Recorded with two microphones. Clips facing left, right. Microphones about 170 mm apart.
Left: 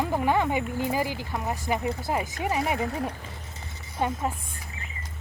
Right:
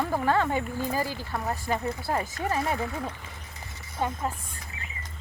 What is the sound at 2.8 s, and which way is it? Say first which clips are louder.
Speech: left 3 dB; 40° left (ahead or behind).